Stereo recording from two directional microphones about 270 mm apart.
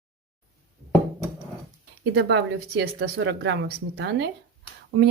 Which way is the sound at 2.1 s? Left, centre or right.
Right.